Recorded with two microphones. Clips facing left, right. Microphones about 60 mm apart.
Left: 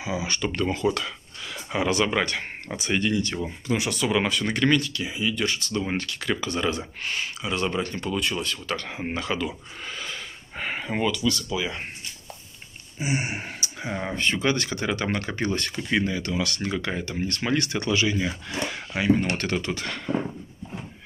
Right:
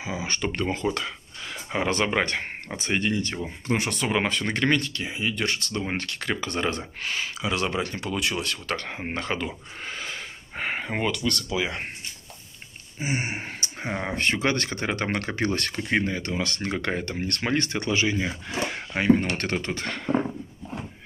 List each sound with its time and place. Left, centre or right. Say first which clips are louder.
0.0 s speech: left 1 dB; right
3.6 s speech: even; right
7.0 s speech: right 1 dB; right
8.1 s speech: left 1 dB; right
8.7 s speech: left 1 dB; right
9.8 s a sound: even; right
13.0 s speech: left 1 dB; right
14.1 s speech: left 1 dB; right
15.1 s speech: right 1 dB; right
15.8 s speech: left 1 dB; right
17.5 s speech: left 1 dB; right
18.9 s speech: right 1 dB; right